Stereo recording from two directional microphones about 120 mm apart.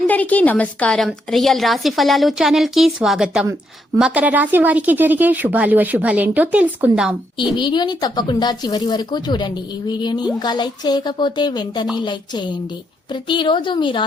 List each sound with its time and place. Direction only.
0.1 s a woman's voice: 15° left (ahead or behind); by 7.0 s 15° right (ahead or behind)
7.6 s speech: 40° left (ahead or behind)